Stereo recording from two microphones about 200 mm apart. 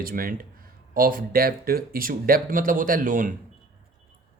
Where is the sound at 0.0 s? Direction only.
45° right (ahead or behind).